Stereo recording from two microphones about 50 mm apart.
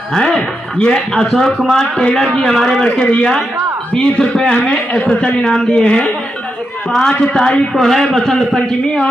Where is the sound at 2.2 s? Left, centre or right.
Centre.